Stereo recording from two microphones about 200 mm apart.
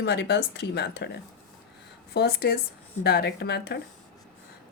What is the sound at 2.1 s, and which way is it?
A woman's voice, 50° left (ahead or behind).